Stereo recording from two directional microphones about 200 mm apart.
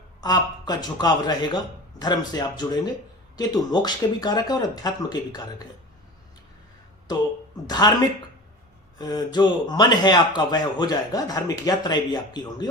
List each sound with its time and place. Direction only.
0.2 s speech: 20° left (ahead or behind)
7.1 s speech: 20° left (ahead or behind)
9.0 s speech: 20° left (ahead or behind)